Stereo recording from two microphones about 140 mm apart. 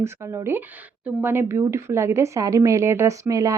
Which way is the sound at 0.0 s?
15° right (ahead or behind).